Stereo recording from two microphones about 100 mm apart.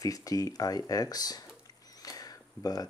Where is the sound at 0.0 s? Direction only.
35° left (ahead or behind).